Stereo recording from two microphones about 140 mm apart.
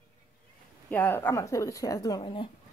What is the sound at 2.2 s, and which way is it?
Speech, 35° left (ahead or behind).